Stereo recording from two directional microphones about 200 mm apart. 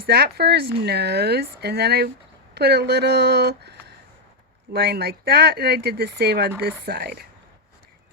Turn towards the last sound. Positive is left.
turn(degrees=-50)  # may be behind; listen again after turning